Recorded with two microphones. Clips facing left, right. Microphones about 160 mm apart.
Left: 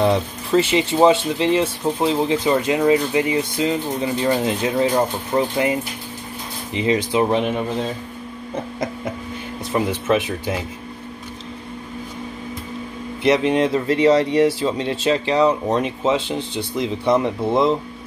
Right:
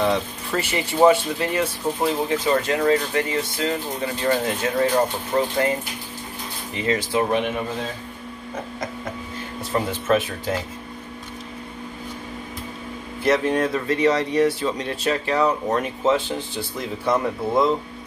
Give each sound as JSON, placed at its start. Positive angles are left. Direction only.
{"t": 0.0, "sound": "speech", "side_deg": 30}
{"t": 6.7, "sound": "speech", "side_deg": 20}
{"t": 9.7, "sound": "speech", "side_deg": 15}
{"t": 13.2, "sound": "speech", "side_deg": 20}